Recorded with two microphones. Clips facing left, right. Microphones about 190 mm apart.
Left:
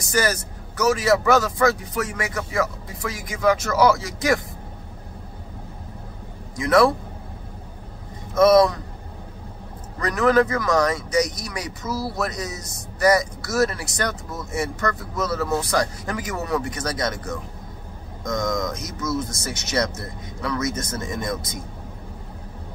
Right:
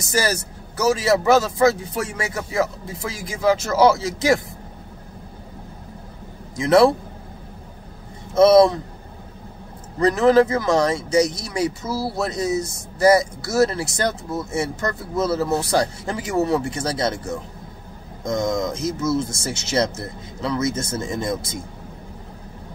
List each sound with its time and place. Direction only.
0.0 s speech: 25° right (ahead or behind)
6.5 s speech: 25° right (ahead or behind)
8.4 s speech: 25° right (ahead or behind)
9.9 s speech: 25° right (ahead or behind)